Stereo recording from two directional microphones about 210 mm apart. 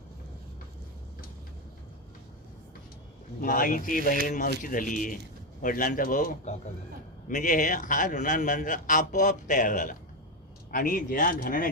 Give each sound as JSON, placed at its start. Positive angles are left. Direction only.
{"t": 3.4, "sound": "a man's voice", "side_deg": 40}